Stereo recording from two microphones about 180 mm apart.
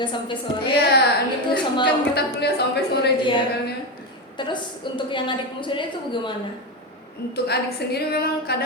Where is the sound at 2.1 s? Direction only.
65° left (ahead or behind).